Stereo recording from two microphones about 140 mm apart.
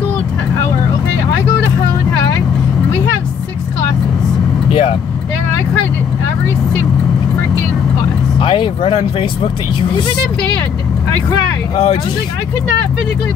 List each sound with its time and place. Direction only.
4.6 s vehicle: 45° left (ahead or behind)
8.0 s vehicle: 35° left (ahead or behind)
11.7 s speech: 45° left (ahead or behind)